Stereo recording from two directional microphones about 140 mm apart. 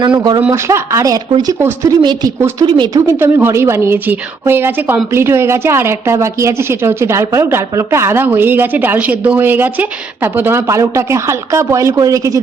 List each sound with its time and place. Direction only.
0.0 s speech: 35° right (ahead or behind)
0.5 s a woman's voice: 20° right (ahead or behind)